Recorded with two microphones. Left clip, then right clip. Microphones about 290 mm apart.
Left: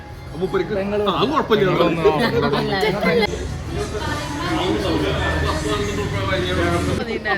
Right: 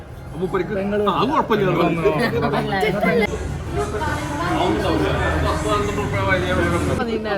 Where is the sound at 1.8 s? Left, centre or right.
Left.